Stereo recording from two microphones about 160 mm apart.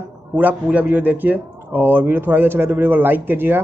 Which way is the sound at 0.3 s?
10° right (ahead or behind).